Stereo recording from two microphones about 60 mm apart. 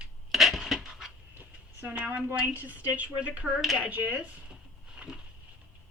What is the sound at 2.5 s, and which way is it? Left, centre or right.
A woman's voice, right.